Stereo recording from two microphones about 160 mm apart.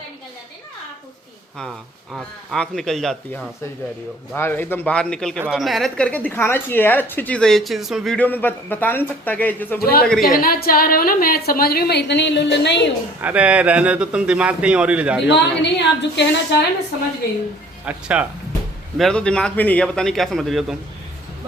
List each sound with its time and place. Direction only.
2.1 s a man's voice: centre (ahead or behind)
4.4 s a woman's voice: 15° left (ahead or behind)
9.7 s a woman's voice: 70° left (ahead or behind)
10.1 s a man's voice: centre (ahead or behind)
10.3 s a woman's voice: 65° left (ahead or behind); by 12.9 s 90° left
13.2 s speech: 10° right (ahead or behind)
15.3 s a woman's voice: 90° left
17.8 s speech: 10° right (ahead or behind)
18.9 s a man's voice: 5° left (ahead or behind)